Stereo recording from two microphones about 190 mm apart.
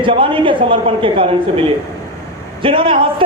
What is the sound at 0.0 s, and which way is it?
A man's voice, 25° right (ahead or behind).